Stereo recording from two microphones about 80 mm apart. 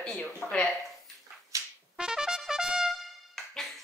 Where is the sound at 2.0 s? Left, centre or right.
Centre.